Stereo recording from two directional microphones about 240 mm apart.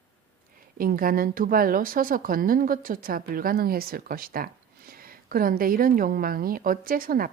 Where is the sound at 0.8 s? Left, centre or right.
Right.